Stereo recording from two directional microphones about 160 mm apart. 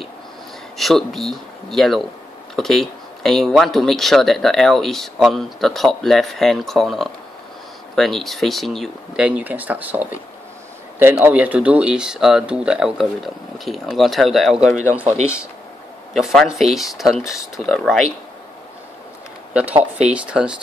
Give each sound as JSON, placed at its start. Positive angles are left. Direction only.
{"t": 0.7, "sound": "speech", "side_deg": 0}
{"t": 16.1, "sound": "speech", "side_deg": 0}
{"t": 19.8, "sound": "speech", "side_deg": -10}